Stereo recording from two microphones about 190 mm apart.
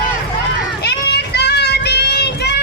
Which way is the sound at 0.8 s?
60° left (ahead or behind).